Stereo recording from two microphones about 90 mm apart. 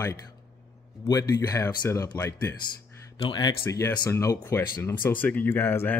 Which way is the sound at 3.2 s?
60° left (ahead or behind).